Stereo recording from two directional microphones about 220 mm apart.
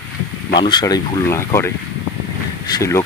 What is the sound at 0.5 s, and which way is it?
Speech, 20° left (ahead or behind).